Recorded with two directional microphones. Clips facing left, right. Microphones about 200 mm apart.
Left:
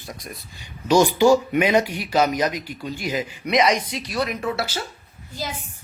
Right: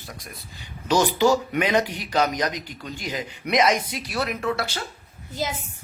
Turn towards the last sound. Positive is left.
turn(degrees=-20)  # may be behind; listen again after turning